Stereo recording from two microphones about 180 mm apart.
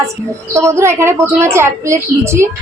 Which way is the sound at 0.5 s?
15° right (ahead or behind).